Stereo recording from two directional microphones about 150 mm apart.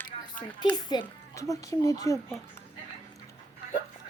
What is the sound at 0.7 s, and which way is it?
A child's voice, 30° left (ahead or behind).